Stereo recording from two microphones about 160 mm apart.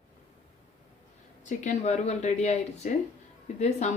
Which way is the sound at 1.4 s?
50° left (ahead or behind).